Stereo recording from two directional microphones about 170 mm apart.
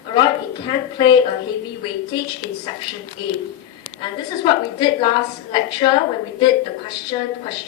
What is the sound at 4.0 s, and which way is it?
A woman's voice, 25° left (ahead or behind).